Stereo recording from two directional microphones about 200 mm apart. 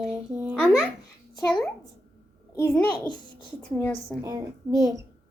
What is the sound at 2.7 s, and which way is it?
Speech, 20° left (ahead or behind).